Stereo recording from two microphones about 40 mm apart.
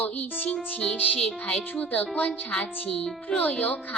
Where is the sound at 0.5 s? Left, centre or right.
Left.